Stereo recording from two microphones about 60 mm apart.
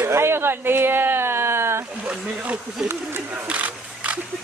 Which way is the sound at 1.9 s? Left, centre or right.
Right.